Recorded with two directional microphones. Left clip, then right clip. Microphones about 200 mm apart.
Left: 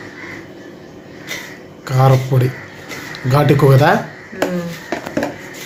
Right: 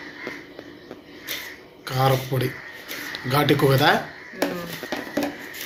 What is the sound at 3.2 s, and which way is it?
Speech, 10° left (ahead or behind).